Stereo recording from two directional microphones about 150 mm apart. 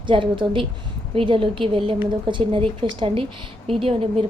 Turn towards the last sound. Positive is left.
turn(degrees=-40)  # may be behind; listen again after turning